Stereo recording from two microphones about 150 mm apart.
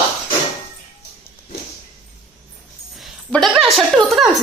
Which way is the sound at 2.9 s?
Centre (ahead or behind).